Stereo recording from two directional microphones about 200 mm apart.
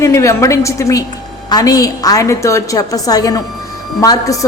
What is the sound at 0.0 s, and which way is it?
A woman's voice, 15° left (ahead or behind).